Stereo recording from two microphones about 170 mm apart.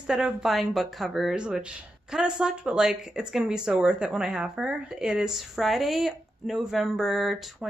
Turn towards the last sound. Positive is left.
turn(degrees=0)  # may be behind; listen again after turning